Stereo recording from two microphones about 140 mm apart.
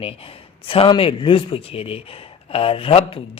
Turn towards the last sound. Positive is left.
turn(degrees=40)  # may be behind; listen again after turning